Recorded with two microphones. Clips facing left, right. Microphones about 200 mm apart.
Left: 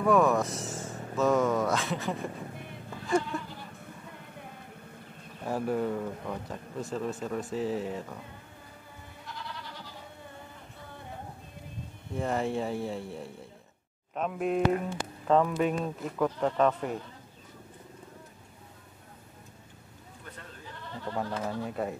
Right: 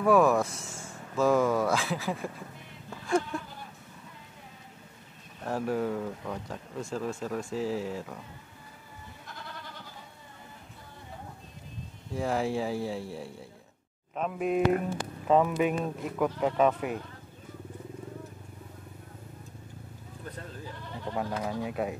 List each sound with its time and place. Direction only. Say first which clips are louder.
0.0 s speech: right 1 dB; centre (ahead or behind)
4.1 s music: left 5 dB; 55° left (ahead or behind)
5.4 s speech: even; centre (ahead or behind)
9.3 s goat: left 3 dB; 50° right (ahead or behind)
12.1 s speech: right 1 dB; centre (ahead or behind)
21.0 s speech: right 1 dB; 10° right (ahead or behind)